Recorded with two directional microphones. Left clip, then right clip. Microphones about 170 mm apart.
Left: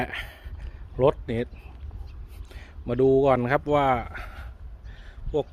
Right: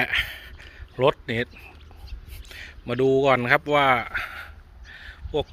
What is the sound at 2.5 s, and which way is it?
Speech, 5° left (ahead or behind).